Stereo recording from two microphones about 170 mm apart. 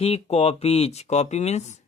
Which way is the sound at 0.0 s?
40° left (ahead or behind).